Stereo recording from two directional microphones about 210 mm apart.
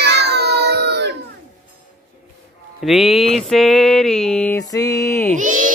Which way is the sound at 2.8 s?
Centre (ahead or behind).